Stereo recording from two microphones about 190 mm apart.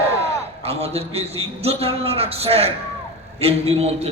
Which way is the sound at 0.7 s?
35° right (ahead or behind).